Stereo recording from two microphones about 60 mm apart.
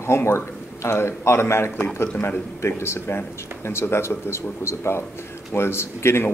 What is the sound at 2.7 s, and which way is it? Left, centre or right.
Speech, left.